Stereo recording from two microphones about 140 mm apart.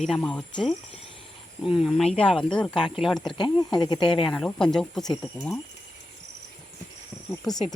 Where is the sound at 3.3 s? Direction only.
35° left (ahead or behind).